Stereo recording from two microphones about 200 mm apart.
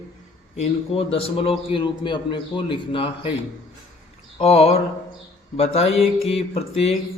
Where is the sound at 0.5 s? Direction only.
30° left (ahead or behind).